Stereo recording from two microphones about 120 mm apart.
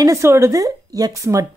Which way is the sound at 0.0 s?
25° right (ahead or behind).